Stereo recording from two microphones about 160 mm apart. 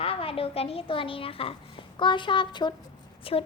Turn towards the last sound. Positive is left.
turn(degrees=35)  # may be behind; listen again after turning